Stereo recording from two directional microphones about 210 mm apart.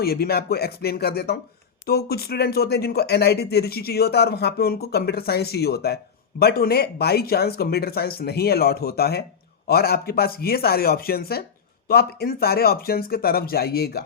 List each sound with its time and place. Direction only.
0.0 s speech: 45° left (ahead or behind)